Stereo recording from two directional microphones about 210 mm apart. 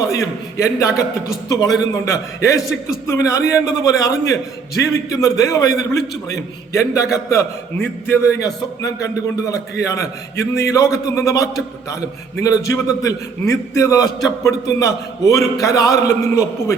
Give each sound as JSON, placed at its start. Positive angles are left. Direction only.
{"t": 0.0, "sound": "a man's voice", "side_deg": 15}